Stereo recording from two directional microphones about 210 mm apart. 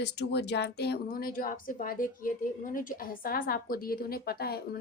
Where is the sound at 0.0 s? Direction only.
55° left (ahead or behind).